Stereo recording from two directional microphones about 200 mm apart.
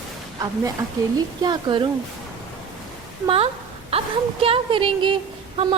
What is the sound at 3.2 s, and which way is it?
Speech, 30° right (ahead or behind).